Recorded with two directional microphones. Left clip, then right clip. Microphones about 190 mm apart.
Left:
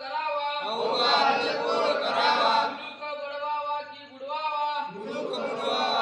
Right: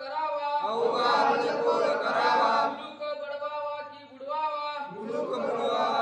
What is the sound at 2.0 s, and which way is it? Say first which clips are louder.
Chant: left 1 dB; 5° left (ahead or behind).